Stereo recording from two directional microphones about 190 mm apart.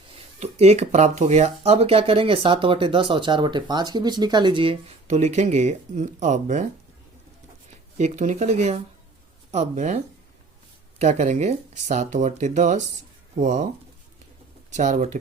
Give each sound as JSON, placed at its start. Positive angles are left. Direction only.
{"t": 0.3, "sound": "speech", "side_deg": -35}
{"t": 7.9, "sound": "speech", "side_deg": -40}
{"t": 14.7, "sound": "speech", "side_deg": -40}